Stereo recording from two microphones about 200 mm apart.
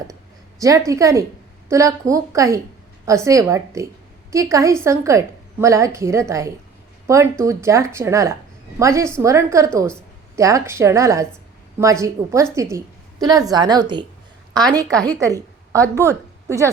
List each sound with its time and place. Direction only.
0.9 s a woman's voice: 15° right (ahead or behind)